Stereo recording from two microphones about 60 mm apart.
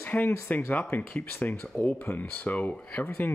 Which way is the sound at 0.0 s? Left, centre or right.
Left.